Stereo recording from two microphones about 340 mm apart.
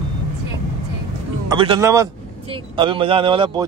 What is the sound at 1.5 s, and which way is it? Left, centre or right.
Speech, centre.